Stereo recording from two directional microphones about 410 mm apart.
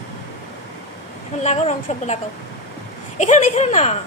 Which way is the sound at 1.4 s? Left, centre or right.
Centre.